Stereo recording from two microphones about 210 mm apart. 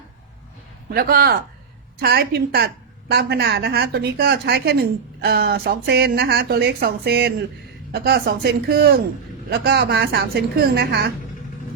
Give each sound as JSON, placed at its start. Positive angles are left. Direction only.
{"t": 0.9, "sound": "a woman's voice", "side_deg": -45}